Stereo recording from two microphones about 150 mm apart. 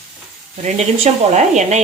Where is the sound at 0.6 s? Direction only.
45° right (ahead or behind).